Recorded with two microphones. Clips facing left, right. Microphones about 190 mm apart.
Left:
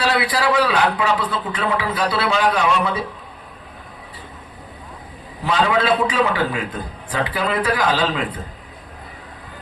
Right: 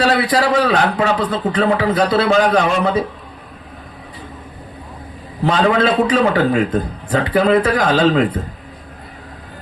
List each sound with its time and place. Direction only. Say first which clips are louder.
0.0 s speech: right 4 dB; 45° right (ahead or behind)
5.5 s speech: right 3 dB; 45° right (ahead or behind)